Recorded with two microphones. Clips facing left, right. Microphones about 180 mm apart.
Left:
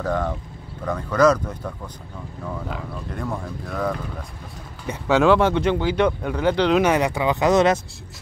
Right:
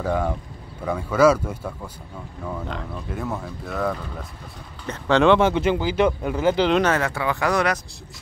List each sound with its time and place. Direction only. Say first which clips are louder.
0.0 s speech: even; 10° right (ahead or behind)
2.7 s speech: even; centre (ahead or behind)
4.8 s speech: even; 10° left (ahead or behind)
6.8 s speech: left 2 dB; 15° left (ahead or behind)